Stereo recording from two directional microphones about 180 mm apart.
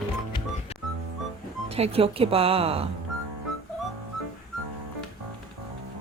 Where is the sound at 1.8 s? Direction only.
35° right (ahead or behind).